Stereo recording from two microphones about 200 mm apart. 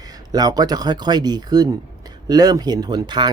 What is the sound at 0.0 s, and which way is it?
Speech, 20° right (ahead or behind).